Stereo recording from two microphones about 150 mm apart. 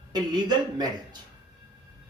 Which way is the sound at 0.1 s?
30° right (ahead or behind).